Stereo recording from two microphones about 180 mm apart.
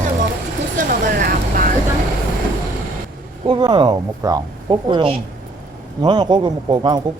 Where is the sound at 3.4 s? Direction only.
25° right (ahead or behind).